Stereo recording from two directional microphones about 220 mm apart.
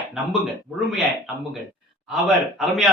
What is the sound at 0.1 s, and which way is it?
Speech, centre (ahead or behind).